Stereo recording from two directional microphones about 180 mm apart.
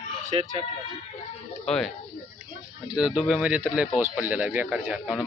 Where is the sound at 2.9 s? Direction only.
5° right (ahead or behind).